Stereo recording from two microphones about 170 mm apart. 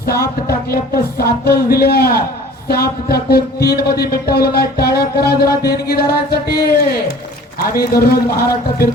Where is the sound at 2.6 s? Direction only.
65° left (ahead or behind).